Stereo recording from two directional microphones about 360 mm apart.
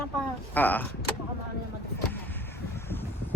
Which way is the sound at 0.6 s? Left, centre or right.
Centre.